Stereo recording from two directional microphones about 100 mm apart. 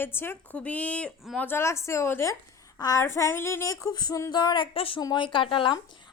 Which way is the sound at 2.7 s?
40° left (ahead or behind).